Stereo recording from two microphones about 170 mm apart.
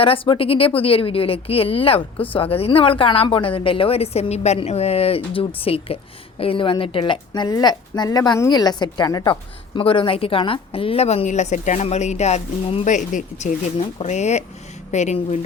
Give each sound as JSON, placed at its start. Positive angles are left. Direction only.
{"t": 0.0, "sound": "a woman's voice", "side_deg": 35}